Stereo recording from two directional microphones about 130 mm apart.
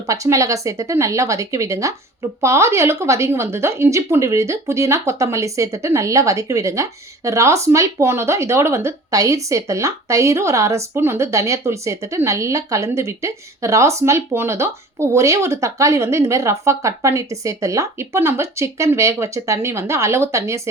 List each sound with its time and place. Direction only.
0.1 s speech: 25° right (ahead or behind)